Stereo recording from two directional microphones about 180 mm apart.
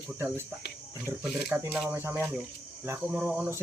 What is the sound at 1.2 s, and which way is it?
Speech, 5° right (ahead or behind).